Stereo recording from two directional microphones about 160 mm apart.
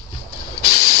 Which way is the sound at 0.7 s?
40° left (ahead or behind).